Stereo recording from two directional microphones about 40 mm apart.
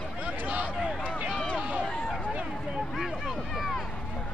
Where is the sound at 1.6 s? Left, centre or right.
Right.